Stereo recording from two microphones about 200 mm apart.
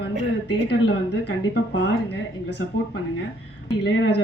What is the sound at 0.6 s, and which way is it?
A woman's voice, 55° left (ahead or behind).